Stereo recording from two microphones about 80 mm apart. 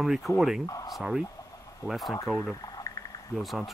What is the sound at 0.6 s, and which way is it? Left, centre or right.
Speech, left.